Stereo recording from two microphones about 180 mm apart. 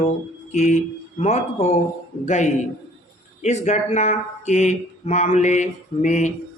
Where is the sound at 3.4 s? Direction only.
40° left (ahead or behind).